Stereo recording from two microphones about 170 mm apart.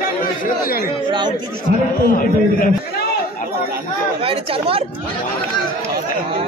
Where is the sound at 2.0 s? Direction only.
55° left (ahead or behind).